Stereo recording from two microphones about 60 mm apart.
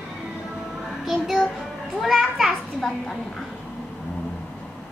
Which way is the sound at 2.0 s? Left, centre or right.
Centre.